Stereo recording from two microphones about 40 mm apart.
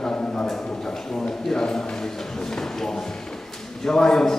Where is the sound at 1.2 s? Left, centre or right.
Centre.